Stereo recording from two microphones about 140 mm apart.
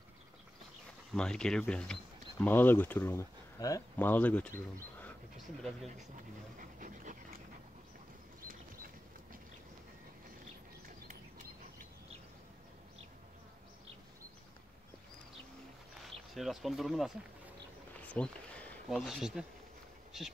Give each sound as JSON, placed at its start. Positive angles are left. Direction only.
{"t": 1.1, "sound": "speech", "side_deg": 5}
{"t": 3.9, "sound": "speech", "side_deg": 15}
{"t": 5.6, "sound": "speech", "side_deg": 0}
{"t": 6.8, "sound": "dog", "side_deg": -70}
{"t": 8.4, "sound": "a sound", "side_deg": -80}
{"t": 16.3, "sound": "speech", "side_deg": 0}
{"t": 18.0, "sound": "a sound", "side_deg": 10}
{"t": 18.9, "sound": "speech", "side_deg": 0}